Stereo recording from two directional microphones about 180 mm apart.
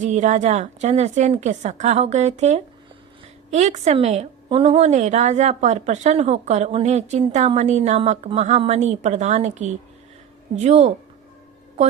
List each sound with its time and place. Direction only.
0.0 s a woman's voice: 40° right (ahead or behind)